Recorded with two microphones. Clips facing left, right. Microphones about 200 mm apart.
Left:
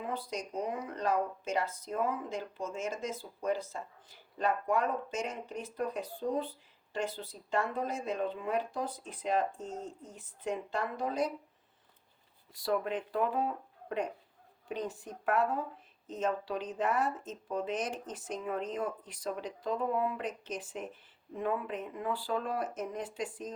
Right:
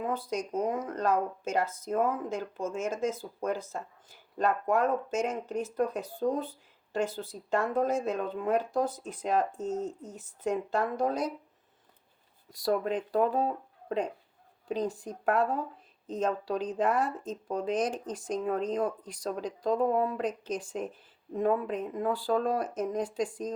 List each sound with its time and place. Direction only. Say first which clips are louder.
0.1 s speech: right 5 dB; 45° right (ahead or behind)
12.5 s speech: right 4 dB; 40° right (ahead or behind)
14.7 s speech: right 6 dB; 35° right (ahead or behind)